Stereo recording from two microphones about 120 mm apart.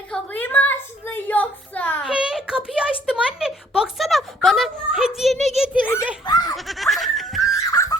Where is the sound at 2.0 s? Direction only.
5° right (ahead or behind).